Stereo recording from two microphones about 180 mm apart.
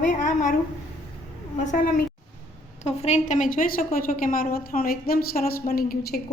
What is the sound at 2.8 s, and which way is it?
A woman's voice, 40° left (ahead or behind).